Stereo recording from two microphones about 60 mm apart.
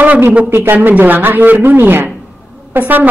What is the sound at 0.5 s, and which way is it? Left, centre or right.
Speech, right.